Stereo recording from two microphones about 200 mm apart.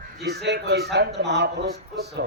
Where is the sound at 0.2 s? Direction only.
55° right (ahead or behind).